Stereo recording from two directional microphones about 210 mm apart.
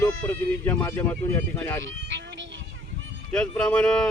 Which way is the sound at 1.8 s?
60° right (ahead or behind).